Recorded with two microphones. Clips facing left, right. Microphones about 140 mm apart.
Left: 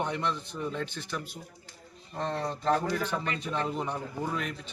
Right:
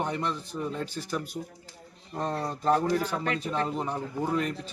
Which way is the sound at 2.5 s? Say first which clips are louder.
Right 4 dB; 40° right (ahead or behind).